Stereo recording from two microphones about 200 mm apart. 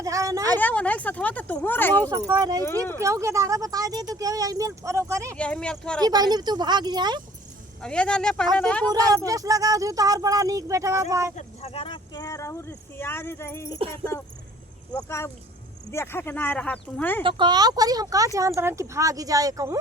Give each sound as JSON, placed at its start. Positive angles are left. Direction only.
{"t": 0.0, "sound": "a sound", "side_deg": -15}
{"t": 0.6, "sound": "speech", "side_deg": 5}
{"t": 2.0, "sound": "speech", "side_deg": -20}
{"t": 5.4, "sound": "speech", "side_deg": 5}
{"t": 6.0, "sound": "speech", "side_deg": -20}
{"t": 7.8, "sound": "speech", "side_deg": 5}
{"t": 8.9, "sound": "speech", "side_deg": -20}
{"t": 11.3, "sound": "speech", "side_deg": 30}
{"t": 14.9, "sound": "speech", "side_deg": 15}
{"t": 17.2, "sound": "speech", "side_deg": -25}